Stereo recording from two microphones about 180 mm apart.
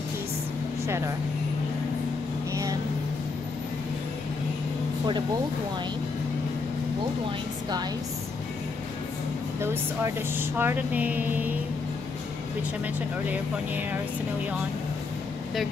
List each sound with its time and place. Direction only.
0.8 s speech: 15° right (ahead or behind)
2.5 s vehicle: 20° right (ahead or behind)
9.6 s speech: 15° right (ahead or behind)